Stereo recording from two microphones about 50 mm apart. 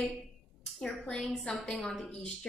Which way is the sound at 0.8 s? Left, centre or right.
Centre.